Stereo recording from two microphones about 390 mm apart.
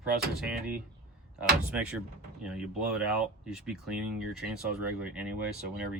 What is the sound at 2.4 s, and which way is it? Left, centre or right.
Speech, centre.